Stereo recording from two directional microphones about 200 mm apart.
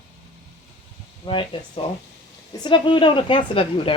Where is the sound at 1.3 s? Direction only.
25° left (ahead or behind).